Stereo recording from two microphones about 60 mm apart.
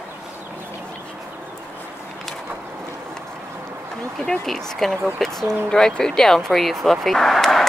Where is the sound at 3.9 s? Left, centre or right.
Centre.